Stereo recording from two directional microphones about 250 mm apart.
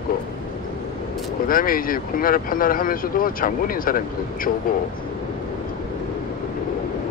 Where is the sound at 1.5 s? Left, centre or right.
Left.